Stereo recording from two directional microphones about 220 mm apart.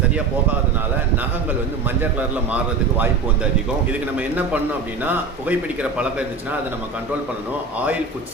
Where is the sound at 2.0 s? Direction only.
5° right (ahead or behind).